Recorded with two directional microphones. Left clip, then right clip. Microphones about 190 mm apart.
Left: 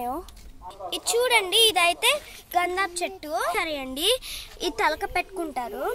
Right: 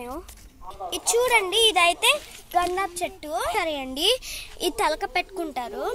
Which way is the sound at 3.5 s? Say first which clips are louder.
Right 2 dB; 20° right (ahead or behind).